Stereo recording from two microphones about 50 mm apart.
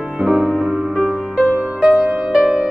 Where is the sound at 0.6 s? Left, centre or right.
Centre.